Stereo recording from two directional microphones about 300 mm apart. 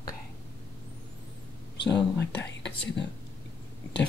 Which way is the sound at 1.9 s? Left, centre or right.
Centre.